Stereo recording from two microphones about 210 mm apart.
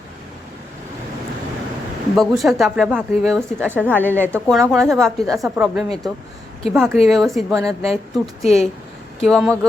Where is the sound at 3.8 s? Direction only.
10° right (ahead or behind).